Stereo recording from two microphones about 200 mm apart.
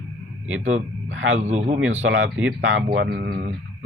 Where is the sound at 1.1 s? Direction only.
70° right (ahead or behind).